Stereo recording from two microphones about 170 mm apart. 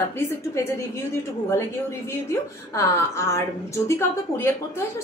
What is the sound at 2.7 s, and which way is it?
A woman's voice, 15° left (ahead or behind).